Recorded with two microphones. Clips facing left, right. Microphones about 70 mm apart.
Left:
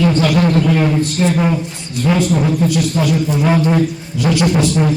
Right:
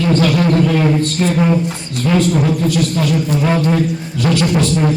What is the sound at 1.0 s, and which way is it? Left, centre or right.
Speech, centre.